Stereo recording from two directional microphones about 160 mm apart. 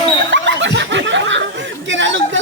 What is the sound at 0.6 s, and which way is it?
Snicker, 90° right.